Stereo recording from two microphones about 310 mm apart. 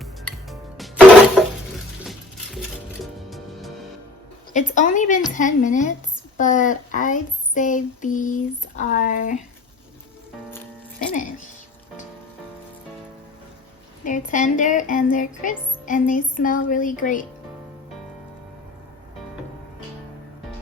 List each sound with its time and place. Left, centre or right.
0.0 s music: centre
4.5 s speech: left
11.1 s speech: left
14.0 s speech: left